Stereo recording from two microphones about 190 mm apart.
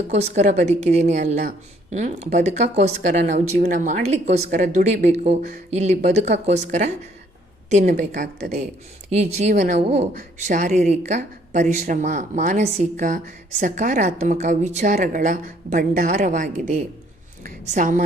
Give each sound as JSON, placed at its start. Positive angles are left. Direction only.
{"t": 0.1, "sound": "a woman's voice", "side_deg": -35}